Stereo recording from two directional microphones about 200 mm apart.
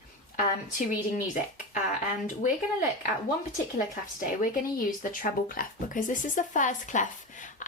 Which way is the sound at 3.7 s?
45° left (ahead or behind).